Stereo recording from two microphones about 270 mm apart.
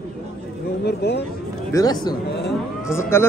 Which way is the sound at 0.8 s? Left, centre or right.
Left.